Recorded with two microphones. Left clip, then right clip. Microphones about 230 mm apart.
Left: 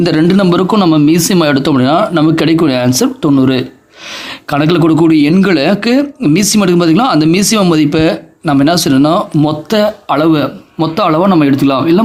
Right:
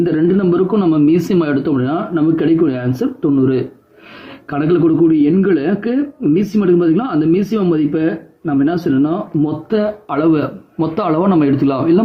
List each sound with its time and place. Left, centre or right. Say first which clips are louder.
0.0 s speech: left 4 dB; left